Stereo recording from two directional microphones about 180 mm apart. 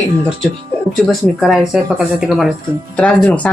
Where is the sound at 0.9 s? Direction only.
Centre (ahead or behind).